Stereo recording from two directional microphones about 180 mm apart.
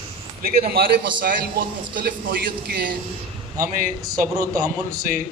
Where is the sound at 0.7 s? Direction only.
55° right (ahead or behind).